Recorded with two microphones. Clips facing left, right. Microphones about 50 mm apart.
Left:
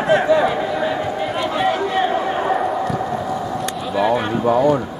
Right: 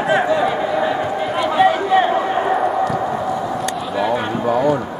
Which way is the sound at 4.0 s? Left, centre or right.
Centre.